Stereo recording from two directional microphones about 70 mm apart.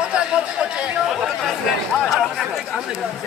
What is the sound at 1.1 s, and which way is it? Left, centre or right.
Chatter, centre.